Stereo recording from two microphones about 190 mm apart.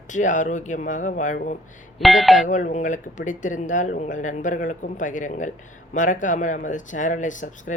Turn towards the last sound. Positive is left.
turn(degrees=40)  # may be behind; listen again after turning